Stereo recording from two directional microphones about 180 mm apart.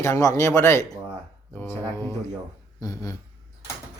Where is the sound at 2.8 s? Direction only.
20° left (ahead or behind).